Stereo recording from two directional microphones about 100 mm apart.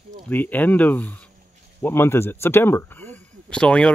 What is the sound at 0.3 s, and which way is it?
Speech, 20° left (ahead or behind).